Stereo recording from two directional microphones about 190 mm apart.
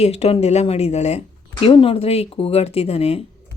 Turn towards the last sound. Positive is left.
turn(degrees=30)  # may be behind; listen again after turning